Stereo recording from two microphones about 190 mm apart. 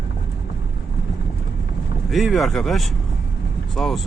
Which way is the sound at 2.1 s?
Centre (ahead or behind).